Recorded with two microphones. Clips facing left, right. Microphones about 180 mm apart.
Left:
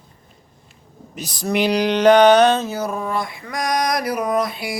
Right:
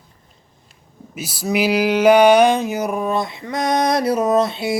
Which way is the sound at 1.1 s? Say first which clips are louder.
Right 1 dB; 5° right (ahead or behind).